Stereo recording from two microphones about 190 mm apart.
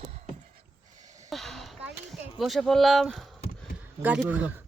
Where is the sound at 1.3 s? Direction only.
Centre (ahead or behind).